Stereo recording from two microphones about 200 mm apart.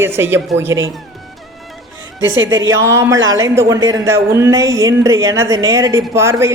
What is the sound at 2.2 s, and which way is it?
Speech, 70° right (ahead or behind).